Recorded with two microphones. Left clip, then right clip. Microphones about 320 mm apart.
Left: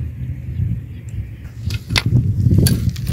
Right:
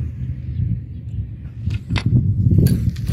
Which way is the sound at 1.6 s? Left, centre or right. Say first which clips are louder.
Left 7 dB; left.